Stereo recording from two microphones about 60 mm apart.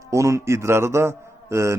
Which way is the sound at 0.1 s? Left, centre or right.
Right.